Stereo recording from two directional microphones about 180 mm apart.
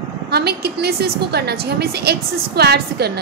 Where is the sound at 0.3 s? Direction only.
65° right (ahead or behind).